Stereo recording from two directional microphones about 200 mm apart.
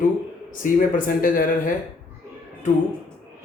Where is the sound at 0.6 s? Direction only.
40° left (ahead or behind).